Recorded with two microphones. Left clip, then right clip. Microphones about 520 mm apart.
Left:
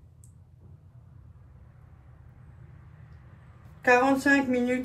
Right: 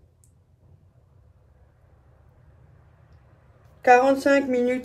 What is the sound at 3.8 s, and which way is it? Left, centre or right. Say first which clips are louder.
Speech: right 5 dB; centre.